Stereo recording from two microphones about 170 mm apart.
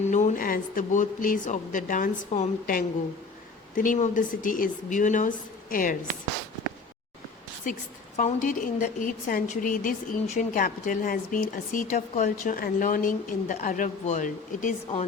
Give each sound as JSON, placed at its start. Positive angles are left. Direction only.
{"t": 0.1, "sound": "a woman's voice", "side_deg": 45}
{"t": 3.8, "sound": "a woman's voice", "side_deg": 45}
{"t": 7.6, "sound": "a woman's voice", "side_deg": 50}